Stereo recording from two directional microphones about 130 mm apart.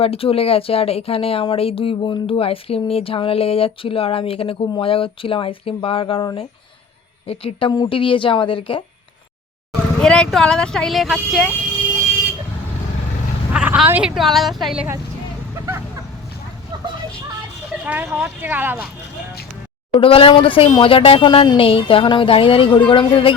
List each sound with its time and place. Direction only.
0.0 s speech: 45° left (ahead or behind)
7.3 s speech: 45° left (ahead or behind)
10.0 s speech: 5° left (ahead or behind)
13.5 s vehicle: 10° right (ahead or behind)
14.2 s speech: centre (ahead or behind)
15.5 s vehicle: 20° right (ahead or behind)
17.8 s speech: 15° right (ahead or behind)
19.9 s speech: 45° left (ahead or behind)